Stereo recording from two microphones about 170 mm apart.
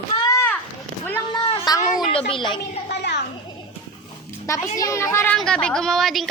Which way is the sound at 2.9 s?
80° left.